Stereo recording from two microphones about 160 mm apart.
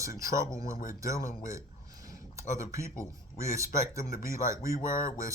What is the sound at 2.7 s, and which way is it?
Speech, 20° right (ahead or behind).